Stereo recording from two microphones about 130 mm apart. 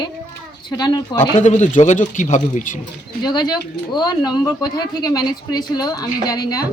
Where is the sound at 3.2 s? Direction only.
35° left (ahead or behind).